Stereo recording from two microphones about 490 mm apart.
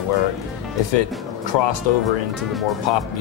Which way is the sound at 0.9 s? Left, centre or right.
Left.